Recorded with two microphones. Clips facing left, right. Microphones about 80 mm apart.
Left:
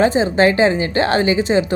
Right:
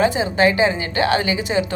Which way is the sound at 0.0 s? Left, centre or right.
Left.